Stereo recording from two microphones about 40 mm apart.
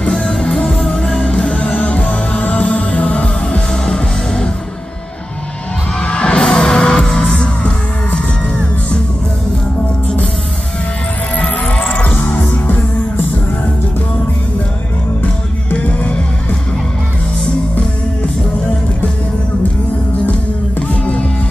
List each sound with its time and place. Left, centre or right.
0.1 s music: centre
0.4 s music: centre
5.9 s music: left
11.3 s music: left
12.0 s music: left
15.7 s music: left
20.9 s music: left